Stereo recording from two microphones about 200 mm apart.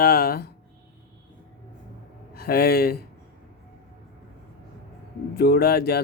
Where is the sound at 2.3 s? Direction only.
50° left (ahead or behind).